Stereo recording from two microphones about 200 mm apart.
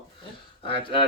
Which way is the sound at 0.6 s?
25° left (ahead or behind).